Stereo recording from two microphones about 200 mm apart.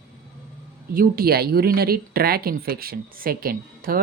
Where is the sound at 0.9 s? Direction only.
45° right (ahead or behind).